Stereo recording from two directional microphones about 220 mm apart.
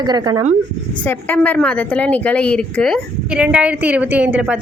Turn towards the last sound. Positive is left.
turn(degrees=-5)  # may be behind; listen again after turning